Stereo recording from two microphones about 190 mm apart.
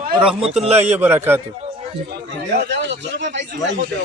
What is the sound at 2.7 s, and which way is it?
Speech, 70° right (ahead or behind).